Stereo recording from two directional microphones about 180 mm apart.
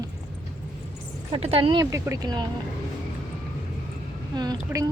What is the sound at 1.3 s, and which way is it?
Speech, 30° right (ahead or behind).